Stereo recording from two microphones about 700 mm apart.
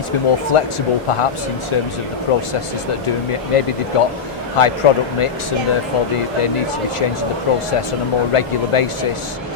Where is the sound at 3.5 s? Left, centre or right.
Left.